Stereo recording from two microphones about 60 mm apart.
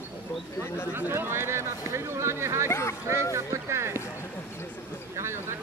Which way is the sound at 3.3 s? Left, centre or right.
Right.